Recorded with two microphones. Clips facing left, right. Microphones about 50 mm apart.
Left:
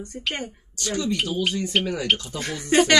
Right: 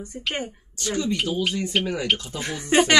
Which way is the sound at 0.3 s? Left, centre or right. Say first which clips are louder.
Right 2 dB; centre.